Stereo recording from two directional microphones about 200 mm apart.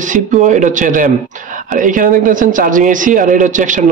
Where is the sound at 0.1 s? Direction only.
40° right (ahead or behind).